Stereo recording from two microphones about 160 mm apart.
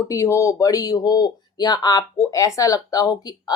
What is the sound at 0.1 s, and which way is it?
Speech, 20° left (ahead or behind).